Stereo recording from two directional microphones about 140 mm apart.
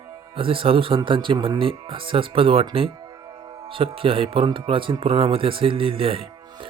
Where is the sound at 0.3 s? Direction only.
40° right (ahead or behind).